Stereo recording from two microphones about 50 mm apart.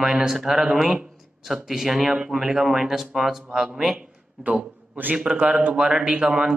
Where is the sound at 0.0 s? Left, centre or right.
Centre.